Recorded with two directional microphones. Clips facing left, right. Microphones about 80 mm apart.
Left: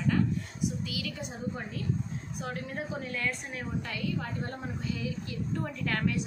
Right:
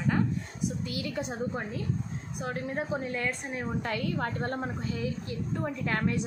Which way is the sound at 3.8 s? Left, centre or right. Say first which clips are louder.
Right 3 dB; right.